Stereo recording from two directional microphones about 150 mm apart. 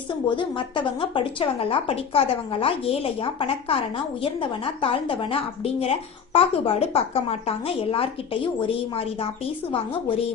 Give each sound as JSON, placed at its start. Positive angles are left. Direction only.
{"t": 0.3, "sound": "speech", "side_deg": 30}